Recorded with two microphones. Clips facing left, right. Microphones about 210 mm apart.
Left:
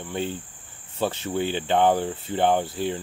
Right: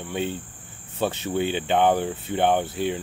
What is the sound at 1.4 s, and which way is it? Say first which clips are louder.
Speech: right 1 dB; 20° right (ahead or behind).